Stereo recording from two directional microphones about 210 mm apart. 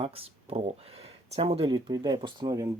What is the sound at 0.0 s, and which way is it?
Speech, 25° right (ahead or behind).